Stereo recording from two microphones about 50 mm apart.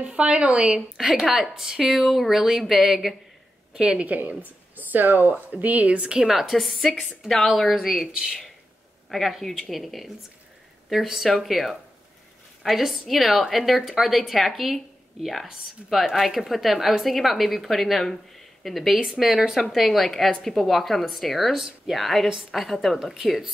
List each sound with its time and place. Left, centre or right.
0.1 s speech: right
0.9 s speech: centre
3.7 s speech: centre
4.0 s speech: right
6.1 s speech: centre
15.9 s speech: centre
19.6 s speech: centre
21.5 s speech: centre
21.9 s speech: centre